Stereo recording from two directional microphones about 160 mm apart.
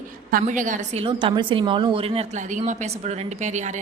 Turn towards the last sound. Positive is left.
turn(degrees=-50)  # may be behind; listen again after turning